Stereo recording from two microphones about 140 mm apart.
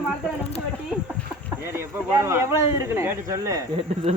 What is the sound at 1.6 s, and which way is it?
Speech, 15° right (ahead or behind).